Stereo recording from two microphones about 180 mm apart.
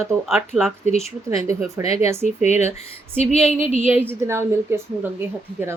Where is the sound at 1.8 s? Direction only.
35° left (ahead or behind).